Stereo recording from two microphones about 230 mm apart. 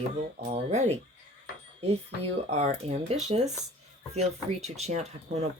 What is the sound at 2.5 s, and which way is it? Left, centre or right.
Speech, right.